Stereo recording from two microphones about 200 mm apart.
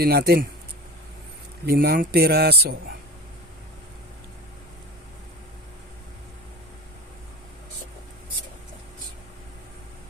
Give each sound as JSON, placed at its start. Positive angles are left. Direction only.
{"t": 0.0, "sound": "speech", "side_deg": -50}
{"t": 1.6, "sound": "speech", "side_deg": -50}